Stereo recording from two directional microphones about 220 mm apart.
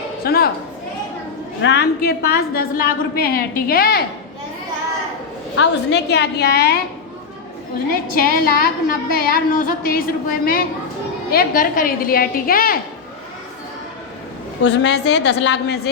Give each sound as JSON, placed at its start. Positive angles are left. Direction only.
{"t": 0.3, "sound": "a woman's voice", "side_deg": 45}
{"t": 1.6, "sound": "a woman's voice", "side_deg": 50}
{"t": 5.5, "sound": "a woman's voice", "side_deg": 50}
{"t": 8.1, "sound": "a woman's voice", "side_deg": 40}
{"t": 14.6, "sound": "a woman's voice", "side_deg": 50}